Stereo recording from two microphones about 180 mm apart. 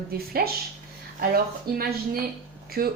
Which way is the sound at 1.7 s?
55° right (ahead or behind).